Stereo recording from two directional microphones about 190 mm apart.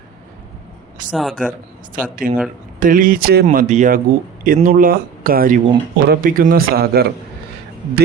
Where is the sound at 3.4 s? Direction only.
40° right (ahead or behind).